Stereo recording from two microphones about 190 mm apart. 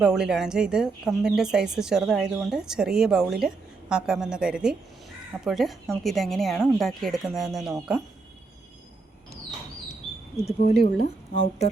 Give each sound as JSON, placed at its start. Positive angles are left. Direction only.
{"t": 0.0, "sound": "a woman's voice", "side_deg": -5}
{"t": 10.7, "sound": "speech", "side_deg": 40}